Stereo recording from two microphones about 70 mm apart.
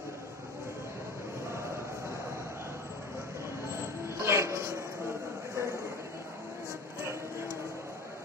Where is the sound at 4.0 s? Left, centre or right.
Right.